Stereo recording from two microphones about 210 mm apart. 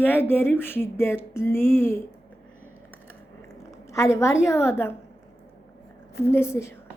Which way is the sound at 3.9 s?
15° left (ahead or behind).